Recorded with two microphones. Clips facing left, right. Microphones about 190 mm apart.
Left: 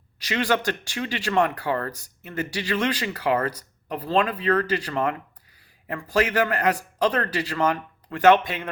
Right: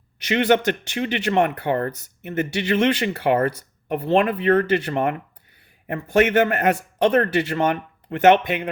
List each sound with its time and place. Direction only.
0.2 s speech: 25° right (ahead or behind)